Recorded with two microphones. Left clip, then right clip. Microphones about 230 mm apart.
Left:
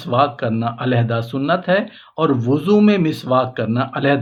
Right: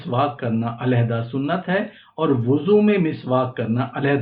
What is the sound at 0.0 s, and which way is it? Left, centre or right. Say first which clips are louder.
Speech: left 5 dB; left.